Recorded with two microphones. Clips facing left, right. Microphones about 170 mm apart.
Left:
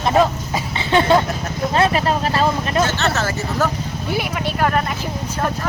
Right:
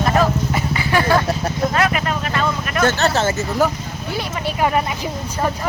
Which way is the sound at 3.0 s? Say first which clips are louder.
Right 3 dB; 30° right (ahead or behind).